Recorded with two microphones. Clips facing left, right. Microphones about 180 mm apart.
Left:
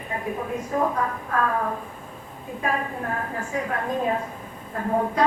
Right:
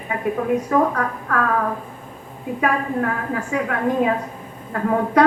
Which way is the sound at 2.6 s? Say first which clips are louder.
Right 6 dB; 75° right (ahead or behind).